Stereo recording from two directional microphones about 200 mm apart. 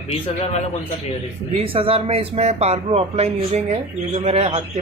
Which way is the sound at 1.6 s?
25° right (ahead or behind).